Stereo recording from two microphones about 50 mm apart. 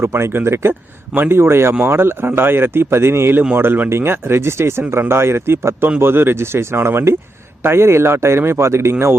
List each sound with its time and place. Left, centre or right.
0.0 s speech: right
0.7 s speech: right
6.0 s speech: right